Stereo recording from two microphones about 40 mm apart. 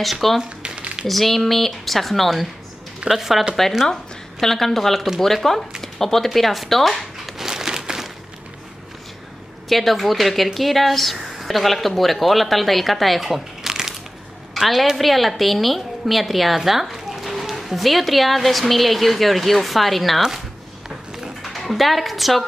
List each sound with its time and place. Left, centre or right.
0.0 s a woman's voice: centre
0.4 s a sound: right
1.0 s a woman's voice: centre
3.1 s speech: centre
3.9 s a woman's voice: centre
7.3 s crumpling: centre
9.7 s a woman's voice: centre
13.7 s crushing: centre
14.5 s a woman's voice: centre
21.5 s a woman's voice: centre